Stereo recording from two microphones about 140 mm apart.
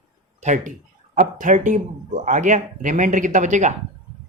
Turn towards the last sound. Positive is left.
turn(degrees=-60)  # may be behind; listen again after turning